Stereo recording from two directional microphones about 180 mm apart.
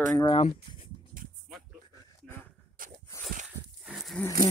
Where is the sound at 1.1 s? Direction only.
50° right (ahead or behind).